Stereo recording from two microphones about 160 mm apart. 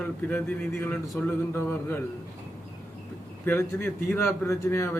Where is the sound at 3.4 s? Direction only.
15° left (ahead or behind).